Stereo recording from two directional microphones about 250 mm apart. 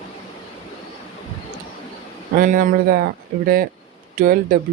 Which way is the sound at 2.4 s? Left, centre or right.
Right.